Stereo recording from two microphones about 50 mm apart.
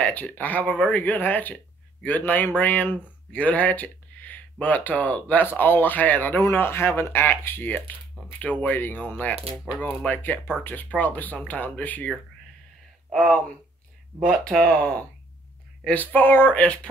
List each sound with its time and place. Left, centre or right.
0.0 s speech: left
6.5 s speech: left
8.3 s speech: left
14.1 s speech: right
14.6 s speech: centre
15.9 s speech: left
16.5 s speech: left